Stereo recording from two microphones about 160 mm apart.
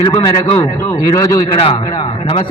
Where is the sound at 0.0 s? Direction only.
25° left (ahead or behind).